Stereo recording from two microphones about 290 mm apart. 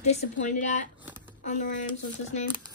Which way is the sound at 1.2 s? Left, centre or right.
Left.